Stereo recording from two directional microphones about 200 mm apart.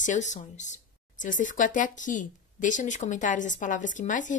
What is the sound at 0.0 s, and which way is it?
A woman's voice, 40° left (ahead or behind).